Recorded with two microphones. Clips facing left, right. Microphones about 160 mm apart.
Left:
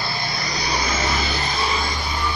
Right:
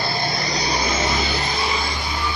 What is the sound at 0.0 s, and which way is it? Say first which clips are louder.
Vehicle: right 3 dB; 35° right (ahead or behind).